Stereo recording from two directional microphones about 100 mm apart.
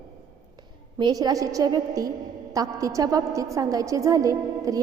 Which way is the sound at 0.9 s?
45° right (ahead or behind).